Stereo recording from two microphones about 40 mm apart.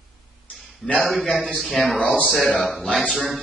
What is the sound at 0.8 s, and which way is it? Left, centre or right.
A man's voice, centre.